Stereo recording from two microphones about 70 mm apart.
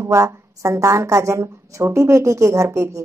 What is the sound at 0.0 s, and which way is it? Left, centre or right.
A woman's voice, right.